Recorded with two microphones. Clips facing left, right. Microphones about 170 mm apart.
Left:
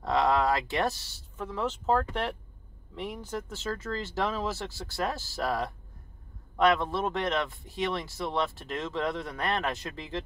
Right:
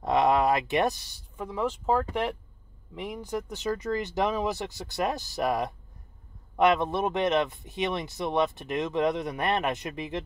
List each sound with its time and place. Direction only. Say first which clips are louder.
0.0 s speech: right 3 dB; 20° right (ahead or behind)